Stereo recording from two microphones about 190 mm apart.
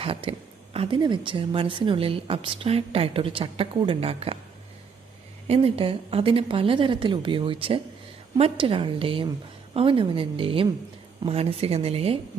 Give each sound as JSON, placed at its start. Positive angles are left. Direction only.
{"t": 0.0, "sound": "a woman's voice", "side_deg": -30}
{"t": 5.5, "sound": "a woman's voice", "side_deg": -30}